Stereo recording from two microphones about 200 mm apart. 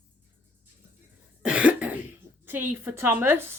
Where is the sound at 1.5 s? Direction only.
5° right (ahead or behind).